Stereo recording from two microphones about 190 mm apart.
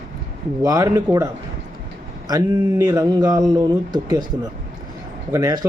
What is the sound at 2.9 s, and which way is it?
Speech, 20° right (ahead or behind).